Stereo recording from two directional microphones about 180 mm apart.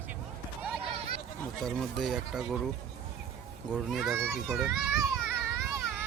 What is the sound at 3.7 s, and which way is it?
A child's voice, centre (ahead or behind).